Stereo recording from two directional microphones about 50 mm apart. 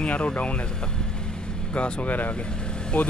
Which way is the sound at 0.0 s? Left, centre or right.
Left.